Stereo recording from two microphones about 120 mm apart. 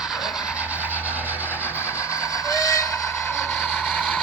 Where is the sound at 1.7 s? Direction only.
20° left (ahead or behind).